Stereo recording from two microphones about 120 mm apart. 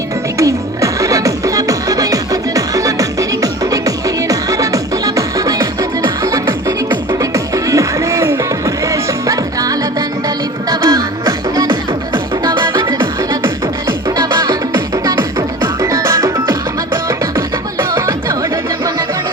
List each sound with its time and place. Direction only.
0.3 s music: 25° right (ahead or behind)
14.7 s music: 25° right (ahead or behind)